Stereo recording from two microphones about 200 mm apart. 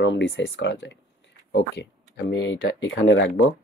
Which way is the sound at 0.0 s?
65° left (ahead or behind).